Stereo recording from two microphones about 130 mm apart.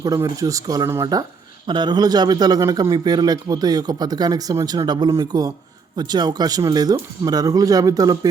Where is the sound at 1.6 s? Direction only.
35° right (ahead or behind).